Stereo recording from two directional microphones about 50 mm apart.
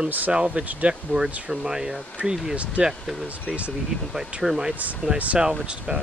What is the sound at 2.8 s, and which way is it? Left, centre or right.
Speech, right.